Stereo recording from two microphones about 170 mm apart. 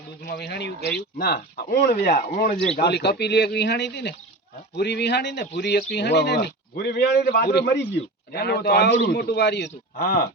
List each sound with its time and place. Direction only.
0.3 s a man's voice: 75° left (ahead or behind)
1.2 s speech: 60° left (ahead or behind)
2.8 s a man's voice: 80° left
8.3 s a man's voice: 70° left (ahead or behind)